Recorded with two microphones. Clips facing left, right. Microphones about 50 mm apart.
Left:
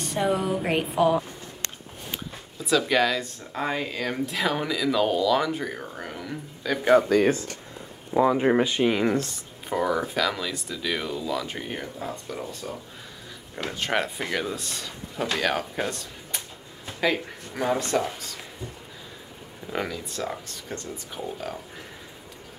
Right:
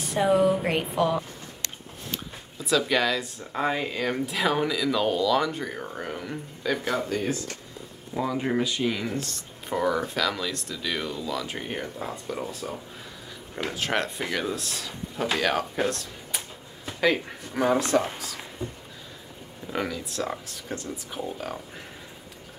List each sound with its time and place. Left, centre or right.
0.0 s speech: centre
2.6 s speech: centre
8.2 s speech: left
9.3 s speech: centre
19.7 s speech: centre